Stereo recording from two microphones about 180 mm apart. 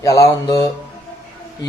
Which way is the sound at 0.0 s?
20° left (ahead or behind).